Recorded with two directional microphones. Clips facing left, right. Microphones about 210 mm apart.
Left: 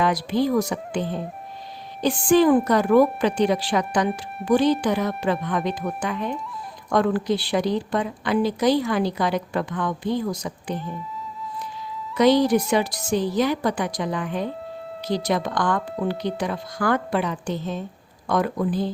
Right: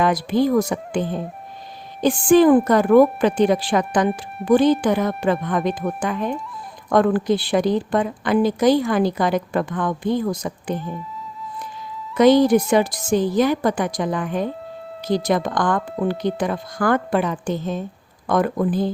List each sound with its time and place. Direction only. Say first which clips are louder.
0.0 s a woman's voice: right 3 dB; 50° right (ahead or behind)
2.2 s a woman's voice: right 4 dB; 50° right (ahead or behind)
12.1 s a woman's voice: right 4 dB; 50° right (ahead or behind)